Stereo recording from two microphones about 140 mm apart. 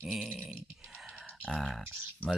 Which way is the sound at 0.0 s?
5° right (ahead or behind).